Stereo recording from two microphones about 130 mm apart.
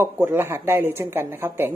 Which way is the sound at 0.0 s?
15° right (ahead or behind).